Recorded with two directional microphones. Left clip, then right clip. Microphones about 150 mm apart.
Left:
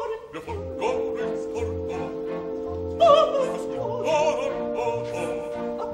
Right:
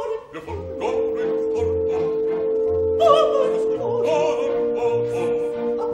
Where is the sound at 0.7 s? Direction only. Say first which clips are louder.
Right 4 dB; 5° left (ahead or behind).